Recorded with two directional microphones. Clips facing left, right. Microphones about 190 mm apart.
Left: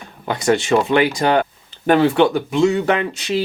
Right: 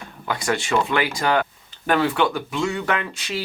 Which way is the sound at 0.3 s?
25° left (ahead or behind).